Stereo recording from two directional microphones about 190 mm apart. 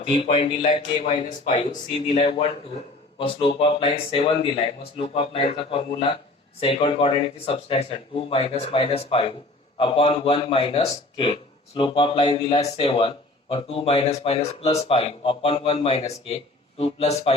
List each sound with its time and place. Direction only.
0.1 s a man's voice: 30° left (ahead or behind)